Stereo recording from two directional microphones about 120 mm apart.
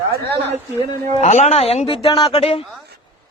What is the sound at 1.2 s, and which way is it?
A woman's voice, 70° left (ahead or behind).